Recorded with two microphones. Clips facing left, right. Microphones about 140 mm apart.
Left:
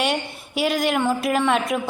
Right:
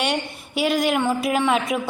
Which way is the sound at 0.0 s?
Centre (ahead or behind).